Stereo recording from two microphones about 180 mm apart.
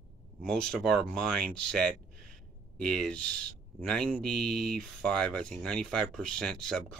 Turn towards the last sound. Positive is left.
turn(degrees=5)  # may be behind; listen again after turning